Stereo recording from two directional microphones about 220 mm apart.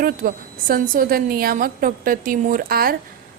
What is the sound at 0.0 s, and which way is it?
A woman's voice, 40° right (ahead or behind).